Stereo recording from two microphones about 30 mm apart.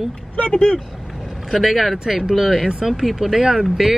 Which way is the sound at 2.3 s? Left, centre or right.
Centre.